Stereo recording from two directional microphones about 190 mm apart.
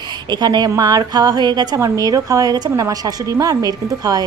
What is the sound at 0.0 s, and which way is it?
Speech, 20° right (ahead or behind).